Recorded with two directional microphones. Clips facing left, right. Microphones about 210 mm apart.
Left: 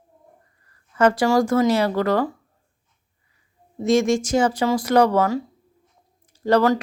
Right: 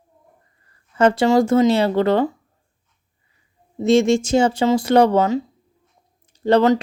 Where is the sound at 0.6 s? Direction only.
25° right (ahead or behind).